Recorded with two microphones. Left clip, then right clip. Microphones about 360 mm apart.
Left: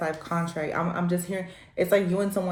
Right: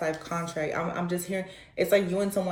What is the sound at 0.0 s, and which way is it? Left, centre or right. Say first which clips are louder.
Speech: left 1 dB; centre.